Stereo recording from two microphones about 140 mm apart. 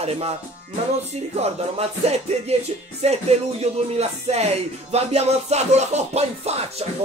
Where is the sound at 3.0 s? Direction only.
50° right (ahead or behind).